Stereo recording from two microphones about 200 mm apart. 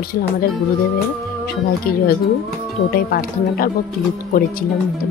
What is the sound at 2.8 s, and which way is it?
Speech, 50° left (ahead or behind).